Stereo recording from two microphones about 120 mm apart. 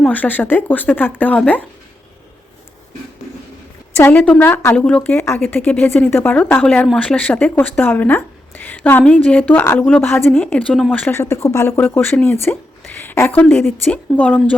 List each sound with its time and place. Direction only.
0.1 s speech: 15° left (ahead or behind)
4.3 s speech: 15° left (ahead or behind)